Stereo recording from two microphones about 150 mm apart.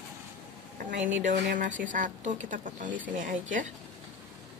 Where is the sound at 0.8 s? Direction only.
55° right (ahead or behind).